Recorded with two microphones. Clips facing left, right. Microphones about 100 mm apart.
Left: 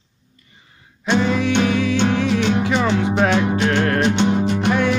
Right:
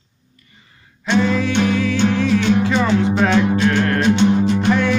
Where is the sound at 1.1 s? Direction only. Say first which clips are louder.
Right 1 dB; 15° left (ahead or behind).